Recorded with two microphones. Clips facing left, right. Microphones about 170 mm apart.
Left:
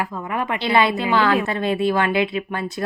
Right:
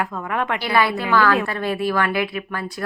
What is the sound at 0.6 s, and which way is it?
Speech, 25° left (ahead or behind).